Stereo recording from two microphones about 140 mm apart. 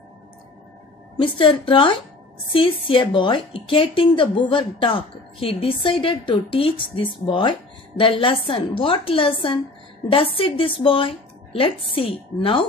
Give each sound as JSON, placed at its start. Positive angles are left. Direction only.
{"t": 1.1, "sound": "speech", "side_deg": 35}